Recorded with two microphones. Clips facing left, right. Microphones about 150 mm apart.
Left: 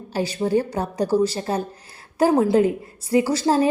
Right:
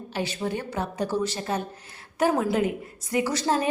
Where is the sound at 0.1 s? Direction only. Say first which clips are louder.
Left 8 dB; 35° left (ahead or behind).